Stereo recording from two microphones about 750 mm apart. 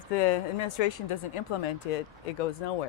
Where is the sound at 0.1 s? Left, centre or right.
Left.